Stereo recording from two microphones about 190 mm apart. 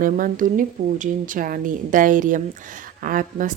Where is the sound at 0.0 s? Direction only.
45° right (ahead or behind).